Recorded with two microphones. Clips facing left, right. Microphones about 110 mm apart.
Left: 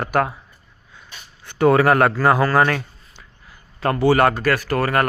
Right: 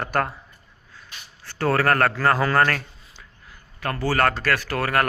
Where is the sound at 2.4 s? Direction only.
10° left (ahead or behind).